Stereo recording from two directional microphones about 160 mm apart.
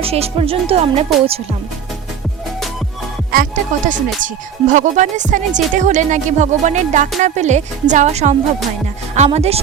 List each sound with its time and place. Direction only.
0.0 s speech: 40° right (ahead or behind)
3.3 s speech: 55° right (ahead or behind)